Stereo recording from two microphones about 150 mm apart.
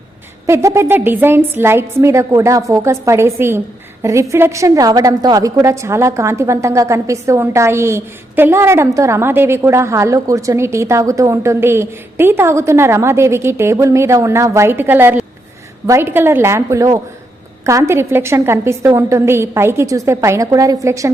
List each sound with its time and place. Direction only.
0.4 s a woman's voice: 20° right (ahead or behind)